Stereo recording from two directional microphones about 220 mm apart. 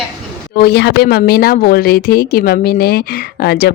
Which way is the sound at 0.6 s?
50° left (ahead or behind).